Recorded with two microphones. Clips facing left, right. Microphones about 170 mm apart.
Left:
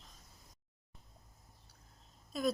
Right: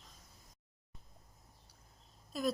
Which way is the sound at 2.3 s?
Centre (ahead or behind).